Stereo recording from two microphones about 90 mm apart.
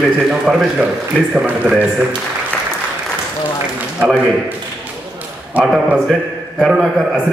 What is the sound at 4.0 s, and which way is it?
A man's voice, 15° right (ahead or behind).